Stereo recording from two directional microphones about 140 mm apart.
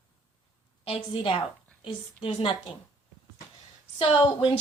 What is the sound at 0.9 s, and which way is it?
A woman's voice, 40° left (ahead or behind).